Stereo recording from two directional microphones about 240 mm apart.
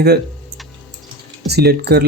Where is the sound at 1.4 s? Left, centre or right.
Right.